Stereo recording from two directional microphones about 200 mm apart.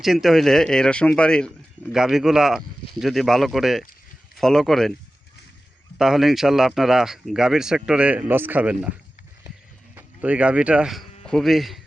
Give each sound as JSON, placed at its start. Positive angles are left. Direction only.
{"t": 0.0, "sound": "speech", "side_deg": 0}
{"t": 6.0, "sound": "speech", "side_deg": 0}
{"t": 9.9, "sound": "speech", "side_deg": -5}